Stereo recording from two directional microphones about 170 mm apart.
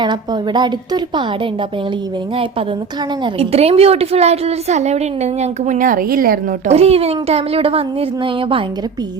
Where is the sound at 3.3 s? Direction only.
35° right (ahead or behind); by 6.3 s 55° right (ahead or behind).